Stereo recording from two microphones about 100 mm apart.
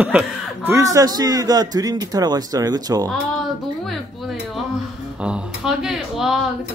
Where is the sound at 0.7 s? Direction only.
35° right (ahead or behind).